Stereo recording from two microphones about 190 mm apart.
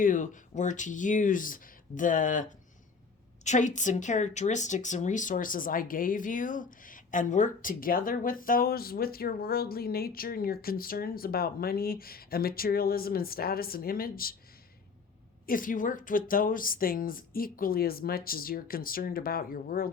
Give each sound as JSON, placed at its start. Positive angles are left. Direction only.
{"t": 0.0, "sound": "speech", "side_deg": 45}
{"t": 15.4, "sound": "speech", "side_deg": 45}